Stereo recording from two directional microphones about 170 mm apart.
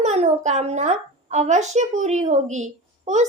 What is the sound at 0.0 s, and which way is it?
A child's voice, 40° right (ahead or behind).